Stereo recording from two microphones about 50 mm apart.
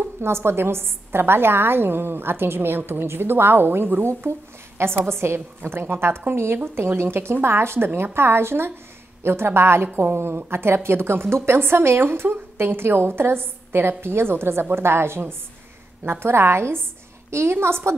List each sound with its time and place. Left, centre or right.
0.2 s a woman's voice: right